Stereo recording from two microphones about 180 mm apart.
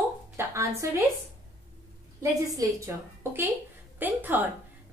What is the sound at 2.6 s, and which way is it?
Speech, 20° right (ahead or behind).